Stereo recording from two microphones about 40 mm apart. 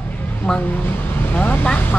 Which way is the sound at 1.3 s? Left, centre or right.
Left.